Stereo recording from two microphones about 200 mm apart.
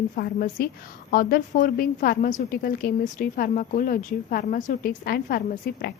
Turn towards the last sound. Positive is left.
turn(degrees=45)  # may be behind; listen again after turning